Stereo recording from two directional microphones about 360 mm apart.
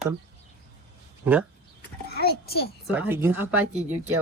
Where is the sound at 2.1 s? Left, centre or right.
Left.